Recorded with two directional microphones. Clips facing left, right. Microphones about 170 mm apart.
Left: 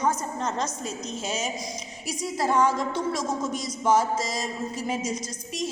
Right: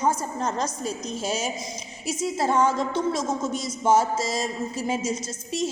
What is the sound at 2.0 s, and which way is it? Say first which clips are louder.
Speech: right 2 dB; 25° right (ahead or behind).